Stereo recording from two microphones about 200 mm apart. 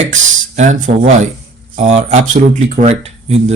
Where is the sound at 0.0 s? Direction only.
35° right (ahead or behind).